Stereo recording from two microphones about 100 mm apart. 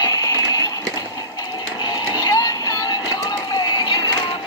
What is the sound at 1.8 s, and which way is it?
Music, 40° left (ahead or behind).